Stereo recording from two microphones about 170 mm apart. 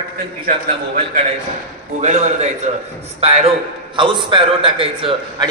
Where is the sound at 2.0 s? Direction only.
45° right (ahead or behind).